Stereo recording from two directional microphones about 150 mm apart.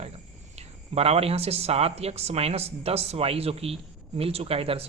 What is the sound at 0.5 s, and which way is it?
A man's voice, 45° right (ahead or behind).